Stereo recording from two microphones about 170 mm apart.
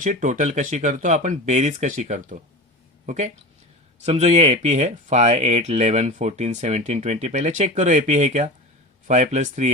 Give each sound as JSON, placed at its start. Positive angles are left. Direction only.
{"t": 0.0, "sound": "speech", "side_deg": -45}
{"t": 4.0, "sound": "speech", "side_deg": -40}